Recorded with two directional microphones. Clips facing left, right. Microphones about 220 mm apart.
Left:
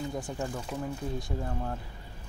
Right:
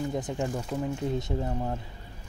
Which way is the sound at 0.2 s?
25° right (ahead or behind).